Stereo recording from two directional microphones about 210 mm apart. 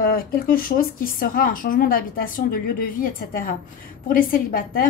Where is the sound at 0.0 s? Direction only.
45° left (ahead or behind).